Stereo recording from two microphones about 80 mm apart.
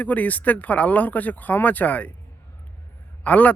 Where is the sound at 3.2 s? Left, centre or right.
Centre.